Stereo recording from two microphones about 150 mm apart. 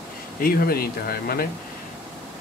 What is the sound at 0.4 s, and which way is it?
Speech, 80° left.